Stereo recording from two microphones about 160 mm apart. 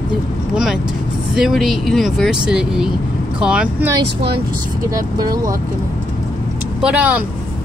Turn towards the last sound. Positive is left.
turn(degrees=-10)  # may be behind; listen again after turning